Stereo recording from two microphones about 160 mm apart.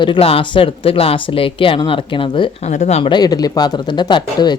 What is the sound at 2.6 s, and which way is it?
Speech, 45° left (ahead or behind).